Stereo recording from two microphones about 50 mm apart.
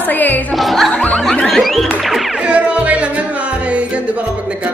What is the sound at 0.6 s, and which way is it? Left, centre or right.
Music, centre.